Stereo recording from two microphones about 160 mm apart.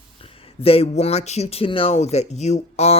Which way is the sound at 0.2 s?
35° left (ahead or behind).